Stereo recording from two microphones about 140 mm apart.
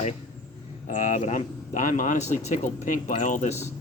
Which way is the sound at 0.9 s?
60° left (ahead or behind).